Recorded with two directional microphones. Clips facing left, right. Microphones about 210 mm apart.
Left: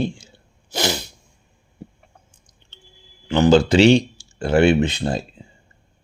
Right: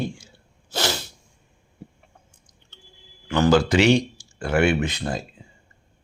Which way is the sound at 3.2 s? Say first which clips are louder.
Left 4 dB; 20° left (ahead or behind).